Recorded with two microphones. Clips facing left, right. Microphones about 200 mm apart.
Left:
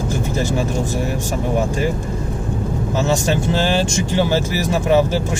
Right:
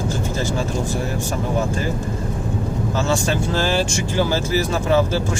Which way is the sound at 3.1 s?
20° left (ahead or behind).